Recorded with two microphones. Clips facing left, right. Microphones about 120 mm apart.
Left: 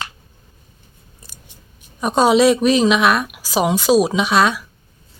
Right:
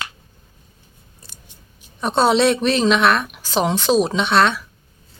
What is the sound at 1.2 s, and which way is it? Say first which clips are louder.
Scissors: left 1 dB; 15° left (ahead or behind).